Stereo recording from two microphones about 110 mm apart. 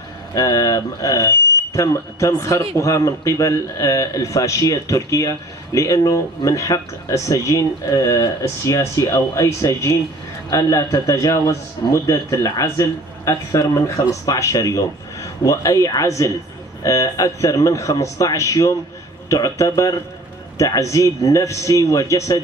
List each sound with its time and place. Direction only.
0.3 s speech: 35° left (ahead or behind)